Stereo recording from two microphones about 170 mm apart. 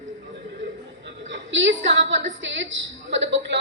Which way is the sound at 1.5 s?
90° right.